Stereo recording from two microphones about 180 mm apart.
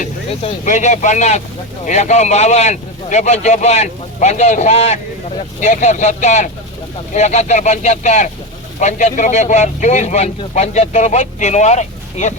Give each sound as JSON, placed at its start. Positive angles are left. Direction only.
{"t": 0.0, "sound": "speech", "side_deg": 45}